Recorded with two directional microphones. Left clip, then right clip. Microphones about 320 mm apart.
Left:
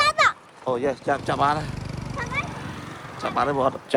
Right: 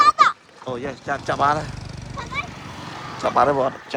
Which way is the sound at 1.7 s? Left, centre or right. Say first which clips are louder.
Left 2 dB; left.